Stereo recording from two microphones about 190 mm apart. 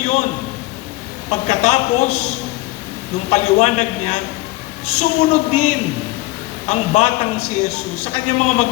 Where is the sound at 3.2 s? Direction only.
35° left (ahead or behind).